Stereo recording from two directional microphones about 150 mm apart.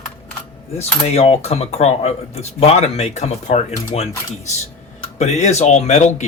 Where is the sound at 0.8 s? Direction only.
45° left (ahead or behind).